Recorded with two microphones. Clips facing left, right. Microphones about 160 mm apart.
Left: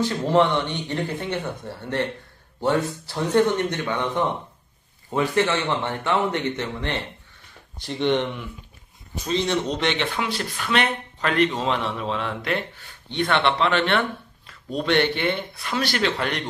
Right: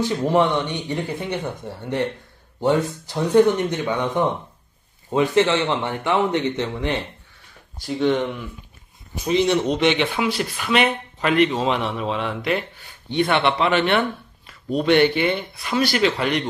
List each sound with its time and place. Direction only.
0.0 s speech: 15° right (ahead or behind)